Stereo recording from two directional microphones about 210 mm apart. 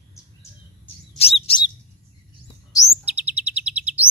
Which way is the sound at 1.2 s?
25° left (ahead or behind).